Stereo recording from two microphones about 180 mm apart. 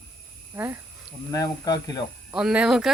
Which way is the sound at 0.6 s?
10° right (ahead or behind).